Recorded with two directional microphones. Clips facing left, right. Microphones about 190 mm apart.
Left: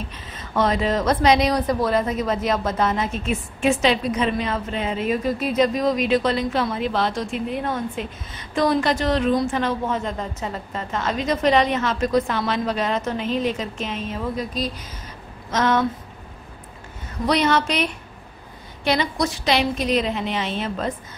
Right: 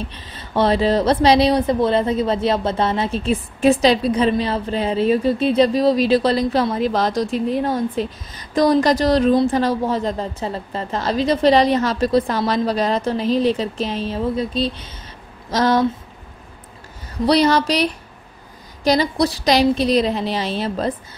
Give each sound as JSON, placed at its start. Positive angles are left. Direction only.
{"t": 0.1, "sound": "speech", "side_deg": -30}
{"t": 17.3, "sound": "speech", "side_deg": -35}
{"t": 18.9, "sound": "speech", "side_deg": -35}